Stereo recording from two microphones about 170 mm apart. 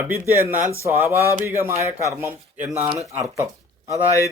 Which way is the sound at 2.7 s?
40° right (ahead or behind).